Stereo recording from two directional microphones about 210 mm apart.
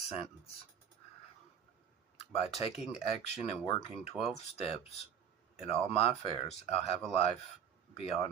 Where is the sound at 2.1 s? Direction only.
30° left (ahead or behind).